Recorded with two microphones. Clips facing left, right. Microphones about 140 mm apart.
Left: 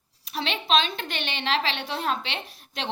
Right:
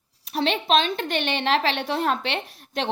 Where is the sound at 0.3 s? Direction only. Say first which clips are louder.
Right 4 dB; 50° right (ahead or behind).